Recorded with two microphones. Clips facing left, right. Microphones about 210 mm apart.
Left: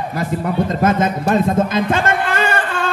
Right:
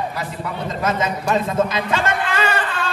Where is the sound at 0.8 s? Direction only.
50° left (ahead or behind).